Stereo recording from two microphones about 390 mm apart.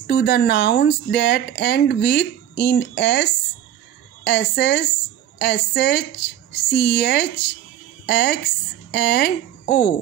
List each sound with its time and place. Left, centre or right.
0.0 s speech: left